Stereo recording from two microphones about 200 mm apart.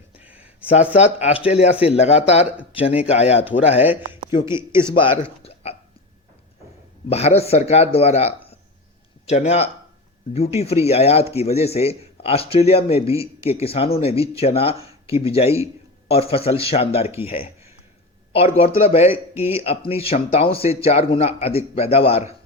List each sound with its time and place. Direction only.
0.2 s a sound: 5° right (ahead or behind)
0.9 s speech: 35° left (ahead or behind)
4.7 s speech: 15° right (ahead or behind)
4.9 s speech: 25° left (ahead or behind)
5.4 s hiccup: 30° left (ahead or behind)
7.1 s speech: 30° left (ahead or behind)
15.4 s speech: 15° right (ahead or behind)
16.3 s speech: 30° left (ahead or behind)